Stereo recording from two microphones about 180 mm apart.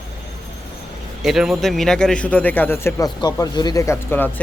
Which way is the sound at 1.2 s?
Centre (ahead or behind).